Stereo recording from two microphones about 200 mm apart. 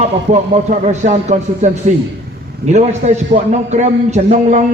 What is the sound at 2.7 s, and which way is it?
A man's voice, 35° right (ahead or behind).